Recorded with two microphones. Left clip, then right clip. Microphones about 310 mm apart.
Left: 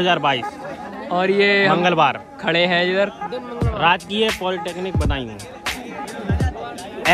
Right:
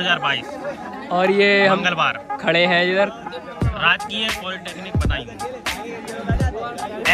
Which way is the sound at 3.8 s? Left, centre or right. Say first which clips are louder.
Left 1 dB; left.